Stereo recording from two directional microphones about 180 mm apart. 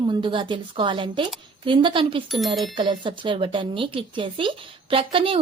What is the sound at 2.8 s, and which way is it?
Speech, 25° right (ahead or behind).